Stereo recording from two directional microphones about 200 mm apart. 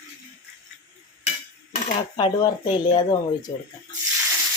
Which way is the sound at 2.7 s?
20° left (ahead or behind).